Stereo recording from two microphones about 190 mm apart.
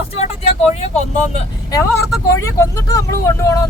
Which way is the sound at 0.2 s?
35° left (ahead or behind).